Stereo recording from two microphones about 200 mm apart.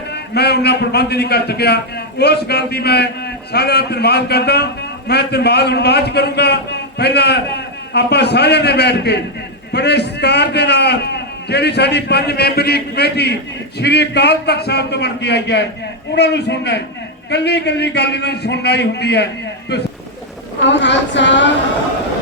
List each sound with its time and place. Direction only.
0.1 s a man's voice: 55° left (ahead or behind)
20.7 s a man's voice: 60° left (ahead or behind)